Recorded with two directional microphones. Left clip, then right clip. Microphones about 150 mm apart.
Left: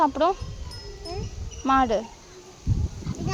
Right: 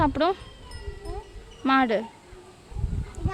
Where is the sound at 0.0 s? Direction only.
30° right (ahead or behind).